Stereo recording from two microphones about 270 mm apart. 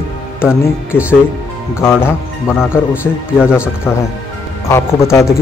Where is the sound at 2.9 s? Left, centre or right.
Centre.